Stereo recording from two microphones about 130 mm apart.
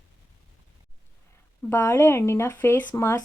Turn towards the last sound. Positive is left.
turn(degrees=20)  # may be behind; listen again after turning